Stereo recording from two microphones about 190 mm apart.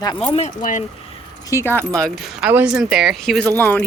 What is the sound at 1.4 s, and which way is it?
Speech, 15° left (ahead or behind).